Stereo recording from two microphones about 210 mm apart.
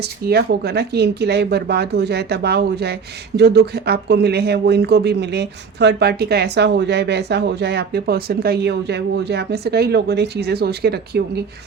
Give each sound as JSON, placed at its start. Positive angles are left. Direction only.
{"t": 0.3, "sound": "speech", "side_deg": -50}